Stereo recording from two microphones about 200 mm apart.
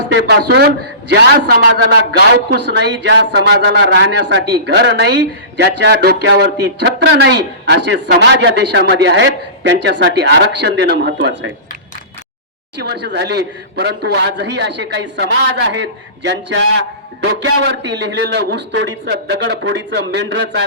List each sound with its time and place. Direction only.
0.3 s speech: 55° right (ahead or behind)
12.7 s speech: 60° right (ahead or behind)